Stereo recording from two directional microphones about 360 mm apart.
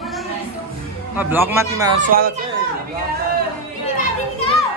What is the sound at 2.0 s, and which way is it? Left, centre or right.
Speech, right.